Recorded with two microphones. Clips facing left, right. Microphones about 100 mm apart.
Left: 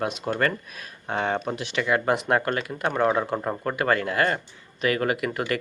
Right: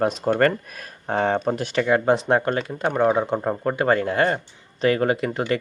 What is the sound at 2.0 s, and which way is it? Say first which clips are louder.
Speech: right 4 dB; 25° right (ahead or behind).